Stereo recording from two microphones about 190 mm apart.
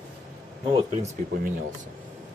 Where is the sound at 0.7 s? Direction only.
35° right (ahead or behind).